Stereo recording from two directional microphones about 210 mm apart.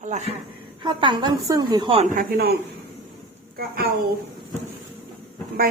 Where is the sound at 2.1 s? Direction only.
45° right (ahead or behind).